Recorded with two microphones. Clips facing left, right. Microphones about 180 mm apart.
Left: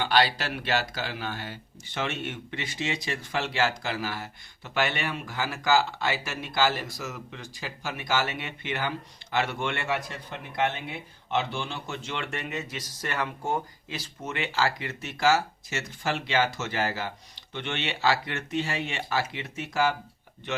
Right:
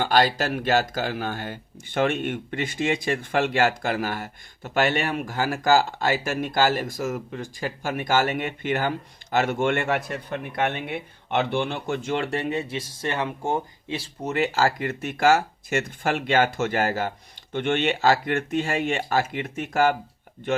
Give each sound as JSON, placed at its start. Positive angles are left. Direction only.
{"t": 0.0, "sound": "a man's voice", "side_deg": -45}
{"t": 12.1, "sound": "speech", "side_deg": -35}